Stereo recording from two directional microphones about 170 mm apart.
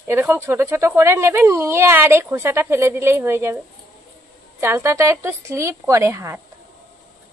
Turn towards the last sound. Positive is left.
turn(degrees=-15)  # may be behind; listen again after turning